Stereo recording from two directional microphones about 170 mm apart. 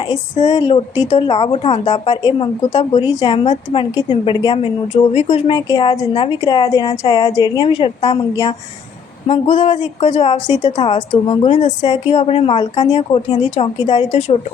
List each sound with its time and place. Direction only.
0.3 s speech: 40° left (ahead or behind)
0.6 s speech: 30° left (ahead or behind)
3.9 s speech: 25° left (ahead or behind)
9.2 s speech: 30° left (ahead or behind)
10.4 s a woman's voice: 45° left (ahead or behind)
10.9 s speech: 30° left (ahead or behind)